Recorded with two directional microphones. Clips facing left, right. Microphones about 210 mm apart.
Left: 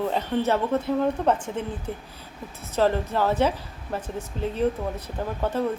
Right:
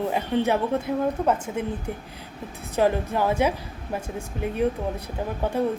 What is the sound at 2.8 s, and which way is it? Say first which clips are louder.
A woman's voice: even; 15° right (ahead or behind).